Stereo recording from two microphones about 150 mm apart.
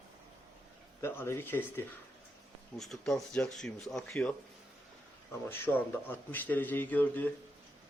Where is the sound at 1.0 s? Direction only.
15° left (ahead or behind).